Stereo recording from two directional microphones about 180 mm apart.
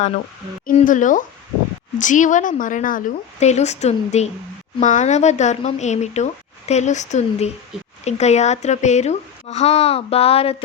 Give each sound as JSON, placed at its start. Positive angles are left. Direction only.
{"t": 0.8, "sound": "a woman's voice", "side_deg": 45}